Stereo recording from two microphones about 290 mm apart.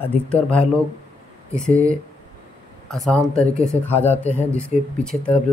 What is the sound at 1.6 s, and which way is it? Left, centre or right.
Speech, right.